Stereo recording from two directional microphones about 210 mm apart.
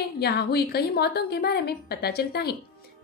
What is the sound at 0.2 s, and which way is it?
A woman's voice, 50° left (ahead or behind).